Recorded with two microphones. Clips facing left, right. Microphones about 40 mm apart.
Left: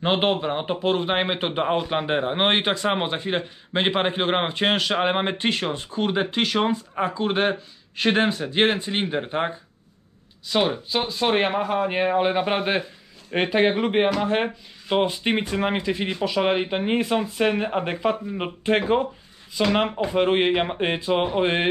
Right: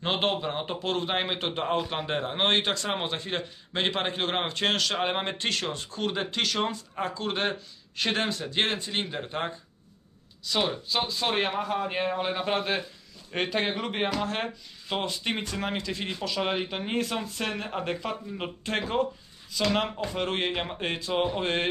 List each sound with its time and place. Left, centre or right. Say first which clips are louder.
0.0 s a man's voice: left 6 dB; centre